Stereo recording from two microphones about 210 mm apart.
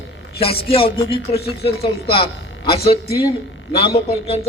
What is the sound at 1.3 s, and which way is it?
Speech, 50° left (ahead or behind).